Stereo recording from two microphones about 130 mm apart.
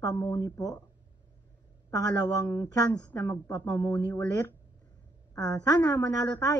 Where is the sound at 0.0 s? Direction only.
20° left (ahead or behind).